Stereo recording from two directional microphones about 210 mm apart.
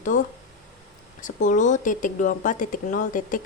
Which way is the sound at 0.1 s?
35° left (ahead or behind).